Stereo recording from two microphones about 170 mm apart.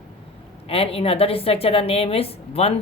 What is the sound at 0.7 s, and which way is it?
A woman's voice, 35° left (ahead or behind).